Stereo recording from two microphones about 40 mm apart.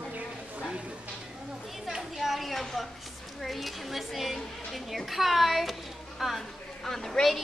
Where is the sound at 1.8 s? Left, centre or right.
Centre.